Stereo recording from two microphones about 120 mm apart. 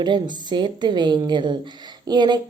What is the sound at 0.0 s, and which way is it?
A woman's voice, 40° right (ahead or behind).